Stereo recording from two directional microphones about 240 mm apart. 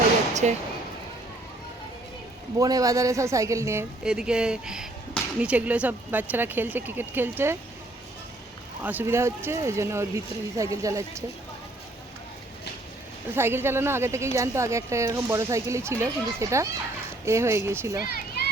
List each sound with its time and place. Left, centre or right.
0.4 s speech: right
2.6 s a woman's voice: centre
8.8 s a woman's voice: centre
13.3 s a woman's voice: centre
18.0 s a sound: left